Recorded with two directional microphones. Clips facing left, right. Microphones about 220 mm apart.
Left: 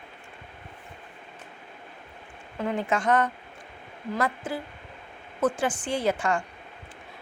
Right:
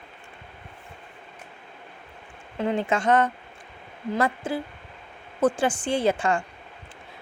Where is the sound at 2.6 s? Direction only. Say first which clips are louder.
Right 3 dB; 25° right (ahead or behind).